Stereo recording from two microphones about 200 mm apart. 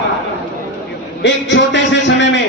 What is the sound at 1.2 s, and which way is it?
A man's voice, 60° left (ahead or behind).